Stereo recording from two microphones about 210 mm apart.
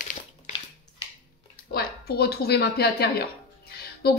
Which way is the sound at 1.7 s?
50° left (ahead or behind).